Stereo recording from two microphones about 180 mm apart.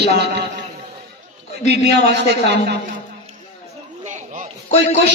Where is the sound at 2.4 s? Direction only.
70° right (ahead or behind).